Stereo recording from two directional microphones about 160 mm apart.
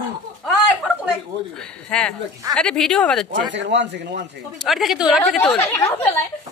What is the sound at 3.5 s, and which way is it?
Speech, 90° right.